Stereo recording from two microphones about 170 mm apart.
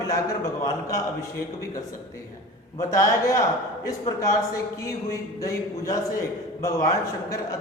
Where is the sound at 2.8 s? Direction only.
20° left (ahead or behind).